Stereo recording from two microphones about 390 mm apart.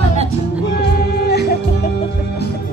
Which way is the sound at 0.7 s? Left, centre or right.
Left.